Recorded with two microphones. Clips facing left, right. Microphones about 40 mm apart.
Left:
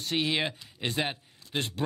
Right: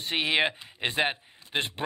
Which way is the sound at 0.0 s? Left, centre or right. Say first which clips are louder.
Right 3 dB; right.